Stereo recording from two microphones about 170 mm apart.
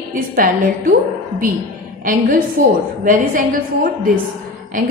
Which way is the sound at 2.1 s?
55° right (ahead or behind).